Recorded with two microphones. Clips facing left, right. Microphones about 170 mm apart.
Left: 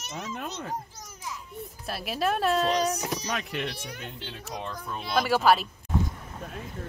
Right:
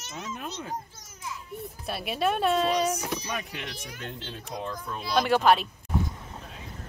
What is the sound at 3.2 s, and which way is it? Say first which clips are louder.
Speech: left 3 dB; 75° left (ahead or behind).